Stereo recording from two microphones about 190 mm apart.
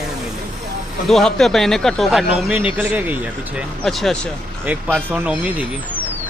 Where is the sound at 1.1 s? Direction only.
Centre (ahead or behind).